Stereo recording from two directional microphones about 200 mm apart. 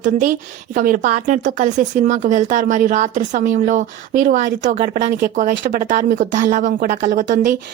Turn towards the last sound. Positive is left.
turn(degrees=-40)  # may be behind; listen again after turning